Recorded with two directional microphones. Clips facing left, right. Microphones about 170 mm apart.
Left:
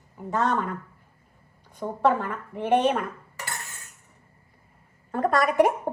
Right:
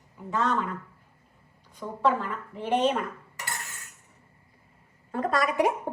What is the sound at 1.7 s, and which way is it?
A woman's voice, 55° left (ahead or behind).